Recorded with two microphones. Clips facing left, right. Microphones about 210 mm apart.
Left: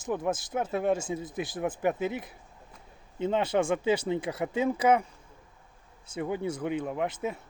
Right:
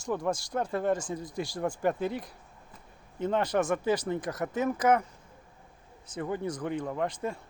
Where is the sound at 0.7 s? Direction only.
10° left (ahead or behind).